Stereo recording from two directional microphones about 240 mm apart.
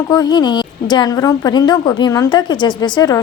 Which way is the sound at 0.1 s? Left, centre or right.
Centre.